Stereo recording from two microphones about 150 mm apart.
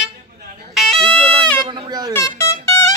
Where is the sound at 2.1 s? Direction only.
20° left (ahead or behind).